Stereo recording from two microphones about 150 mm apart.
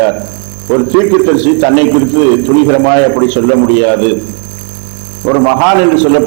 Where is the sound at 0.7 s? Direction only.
20° right (ahead or behind).